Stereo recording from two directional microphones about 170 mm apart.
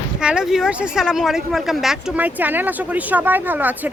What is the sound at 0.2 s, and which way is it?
Speech, 5° right (ahead or behind).